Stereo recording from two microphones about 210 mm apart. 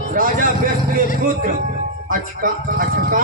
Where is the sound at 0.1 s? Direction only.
40° right (ahead or behind).